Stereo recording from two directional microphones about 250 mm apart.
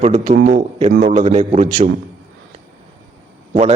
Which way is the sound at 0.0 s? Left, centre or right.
Right.